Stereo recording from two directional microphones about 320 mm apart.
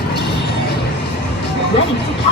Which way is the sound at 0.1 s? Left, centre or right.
Left.